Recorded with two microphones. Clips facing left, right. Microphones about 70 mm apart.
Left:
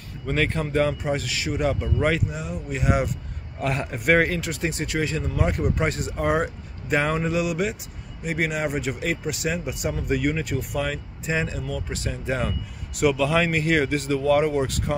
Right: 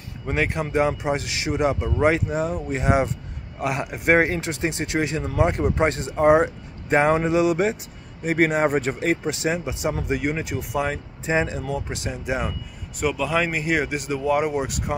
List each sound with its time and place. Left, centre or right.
0.3 s speech: centre
2.2 s a man's voice: right
2.8 s vehicle: right
3.6 s speech: centre
4.0 s a man's voice: right
13.0 s speech: centre